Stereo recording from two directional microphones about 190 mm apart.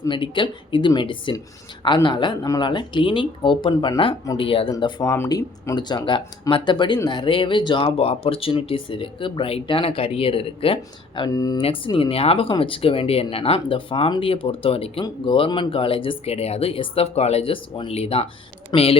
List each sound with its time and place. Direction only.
0.0 s a woman's voice: 25° left (ahead or behind)